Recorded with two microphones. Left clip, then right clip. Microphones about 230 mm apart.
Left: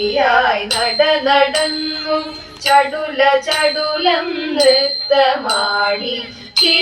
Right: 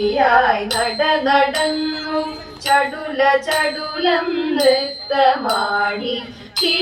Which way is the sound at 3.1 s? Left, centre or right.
Right.